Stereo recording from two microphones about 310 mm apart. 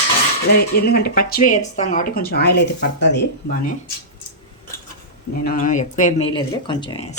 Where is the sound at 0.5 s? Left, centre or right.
Left.